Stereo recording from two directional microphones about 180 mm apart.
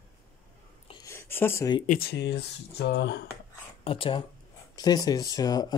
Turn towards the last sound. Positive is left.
turn(degrees=20)  # may be behind; listen again after turning